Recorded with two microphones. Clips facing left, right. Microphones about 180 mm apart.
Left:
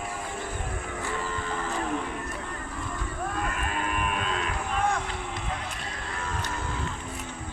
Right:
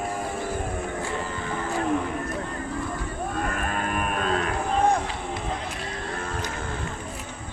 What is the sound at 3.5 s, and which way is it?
Cattle, 45° right (ahead or behind).